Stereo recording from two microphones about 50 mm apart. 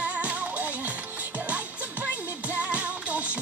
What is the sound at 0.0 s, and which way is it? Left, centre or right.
Music, right.